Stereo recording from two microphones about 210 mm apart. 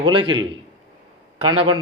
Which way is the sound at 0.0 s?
25° right (ahead or behind).